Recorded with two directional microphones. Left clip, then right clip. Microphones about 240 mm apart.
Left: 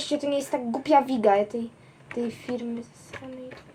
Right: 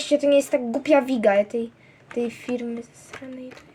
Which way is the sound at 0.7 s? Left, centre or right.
Right.